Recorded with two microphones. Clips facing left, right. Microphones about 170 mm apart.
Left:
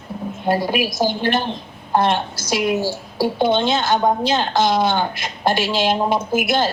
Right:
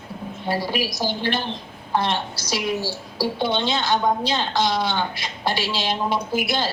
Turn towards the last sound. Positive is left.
turn(degrees=50)  # may be behind; listen again after turning